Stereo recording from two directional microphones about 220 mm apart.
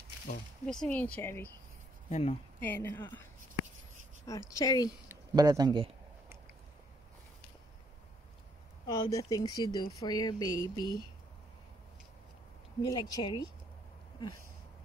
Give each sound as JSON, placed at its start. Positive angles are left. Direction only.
{"t": 0.7, "sound": "speech", "side_deg": 5}
{"t": 2.0, "sound": "speech", "side_deg": 30}
{"t": 2.6, "sound": "speech", "side_deg": 10}
{"t": 4.3, "sound": "speech", "side_deg": 15}
{"t": 5.0, "sound": "a sound", "side_deg": -15}
{"t": 8.8, "sound": "speech", "side_deg": 15}
{"t": 12.9, "sound": "speech", "side_deg": 20}